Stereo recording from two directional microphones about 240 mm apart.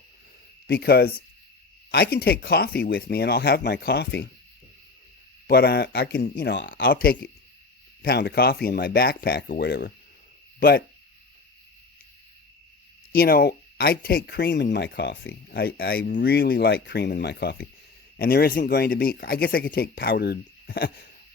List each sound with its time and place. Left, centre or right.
0.7 s speech: left
5.5 s speech: left
13.1 s speech: left